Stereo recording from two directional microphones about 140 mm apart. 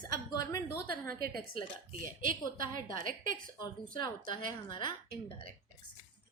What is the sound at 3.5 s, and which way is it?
A woman's voice, 30° left (ahead or behind).